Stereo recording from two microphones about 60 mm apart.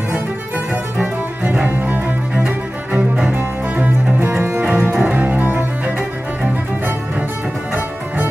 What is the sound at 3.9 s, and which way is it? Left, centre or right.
Cello, right.